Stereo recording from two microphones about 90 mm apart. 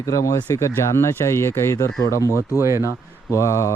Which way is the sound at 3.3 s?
35° left (ahead or behind).